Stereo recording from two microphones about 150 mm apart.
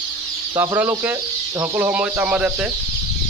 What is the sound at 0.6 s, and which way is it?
Speech, 15° right (ahead or behind).